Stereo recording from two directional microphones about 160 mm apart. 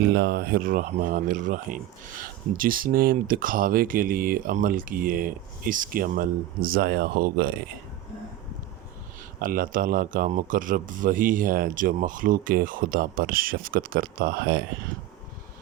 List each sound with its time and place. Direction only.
0.0 s speech: 90° right; by 7.5 s 70° right (ahead or behind)
9.4 s speech: 60° right (ahead or behind); by 14.6 s 85° right